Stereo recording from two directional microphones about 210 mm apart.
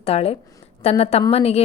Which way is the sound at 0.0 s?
30° left (ahead or behind).